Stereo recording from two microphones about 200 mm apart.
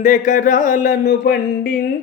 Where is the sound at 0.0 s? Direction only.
40° left (ahead or behind).